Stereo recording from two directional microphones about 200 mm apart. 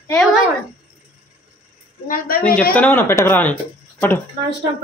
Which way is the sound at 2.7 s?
5° left (ahead or behind).